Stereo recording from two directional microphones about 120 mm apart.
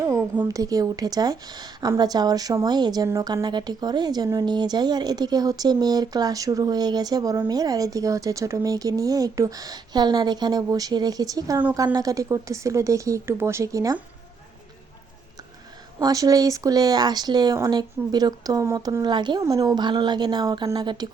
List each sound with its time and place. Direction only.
0.0 s speech: 25° right (ahead or behind)
16.0 s speech: 30° right (ahead or behind)
19.4 s speech: 30° right (ahead or behind)